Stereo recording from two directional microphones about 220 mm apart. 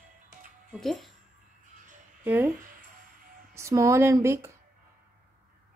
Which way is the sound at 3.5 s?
15° right (ahead or behind).